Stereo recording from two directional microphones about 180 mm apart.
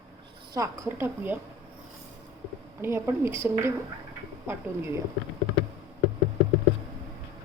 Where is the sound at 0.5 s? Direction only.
20° right (ahead or behind).